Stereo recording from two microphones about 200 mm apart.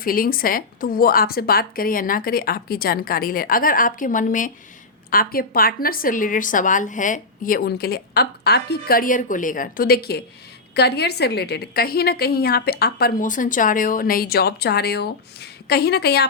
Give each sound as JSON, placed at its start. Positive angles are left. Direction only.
{"t": 0.0, "sound": "a woman's voice", "side_deg": 45}